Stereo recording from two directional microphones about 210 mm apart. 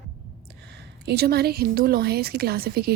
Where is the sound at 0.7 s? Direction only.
55° right (ahead or behind).